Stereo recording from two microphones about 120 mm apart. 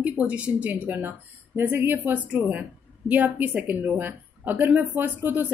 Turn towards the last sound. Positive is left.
turn(degrees=-15)  # may be behind; listen again after turning